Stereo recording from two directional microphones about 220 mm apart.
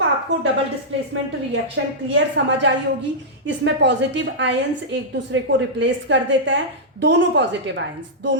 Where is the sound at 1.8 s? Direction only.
60° right (ahead or behind).